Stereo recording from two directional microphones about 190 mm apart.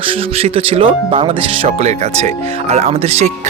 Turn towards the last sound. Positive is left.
turn(degrees=-35)  # may be behind; listen again after turning